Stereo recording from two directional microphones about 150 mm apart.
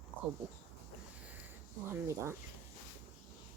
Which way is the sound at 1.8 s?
15° right (ahead or behind).